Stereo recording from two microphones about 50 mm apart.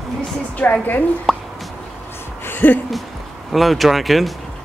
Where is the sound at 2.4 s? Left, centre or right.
Left.